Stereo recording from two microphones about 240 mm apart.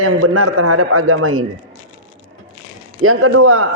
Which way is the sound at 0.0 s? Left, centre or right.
Right.